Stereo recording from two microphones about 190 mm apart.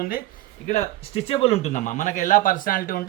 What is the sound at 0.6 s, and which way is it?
A man's voice, 35° left (ahead or behind).